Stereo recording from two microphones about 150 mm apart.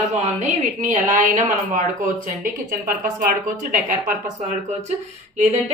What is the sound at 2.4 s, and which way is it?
A woman's voice, 65° right (ahead or behind).